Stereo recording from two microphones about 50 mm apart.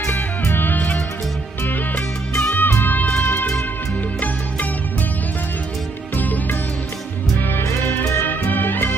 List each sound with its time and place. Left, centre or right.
0.0 s music: left
2.0 s music: left
6.1 s music: left
7.4 s music: left